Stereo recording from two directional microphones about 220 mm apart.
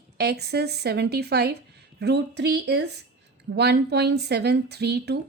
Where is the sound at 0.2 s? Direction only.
45° right (ahead or behind).